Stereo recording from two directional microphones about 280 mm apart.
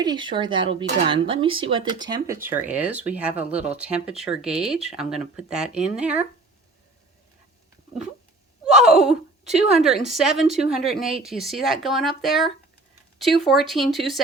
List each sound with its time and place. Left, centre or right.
0.0 s speech: centre
8.6 s a sound: centre
9.5 s speech: centre